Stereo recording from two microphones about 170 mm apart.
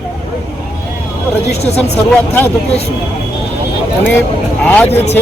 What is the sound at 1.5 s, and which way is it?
Speech, 40° left (ahead or behind).